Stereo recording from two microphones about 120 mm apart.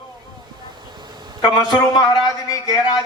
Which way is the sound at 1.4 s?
35° left (ahead or behind).